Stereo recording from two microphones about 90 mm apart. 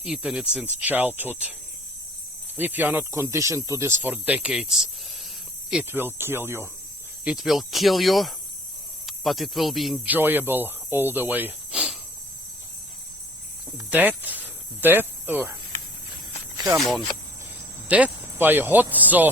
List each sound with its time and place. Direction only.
0.0 s speech: 10° right (ahead or behind)
2.6 s speech: 20° right (ahead or behind)
3.0 s speech: 30° right (ahead or behind); by 4.9 s 5° right (ahead or behind)
5.9 s speech: 25° right (ahead or behind)
7.3 s speech: centre (ahead or behind)
10.1 s speech: 20° right (ahead or behind)
13.7 s speech: 20° right (ahead or behind)
16.7 s speech: centre (ahead or behind)
17.8 s speech: 15° right (ahead or behind)